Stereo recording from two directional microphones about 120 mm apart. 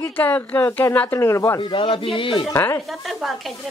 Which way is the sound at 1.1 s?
25° left (ahead or behind).